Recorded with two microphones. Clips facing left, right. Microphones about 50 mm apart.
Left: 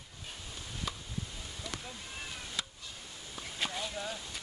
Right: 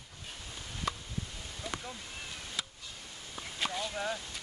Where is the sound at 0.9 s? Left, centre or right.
Right.